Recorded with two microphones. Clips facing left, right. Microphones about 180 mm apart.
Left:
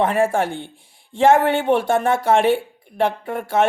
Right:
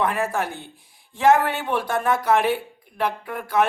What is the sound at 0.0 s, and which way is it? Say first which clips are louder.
Speech: left 5 dB; 25° left (ahead or behind).